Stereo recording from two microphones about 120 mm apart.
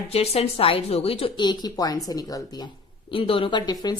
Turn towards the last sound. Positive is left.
turn(degrees=35)  # may be behind; listen again after turning